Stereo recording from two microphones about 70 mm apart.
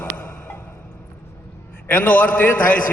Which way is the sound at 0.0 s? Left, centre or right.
Left.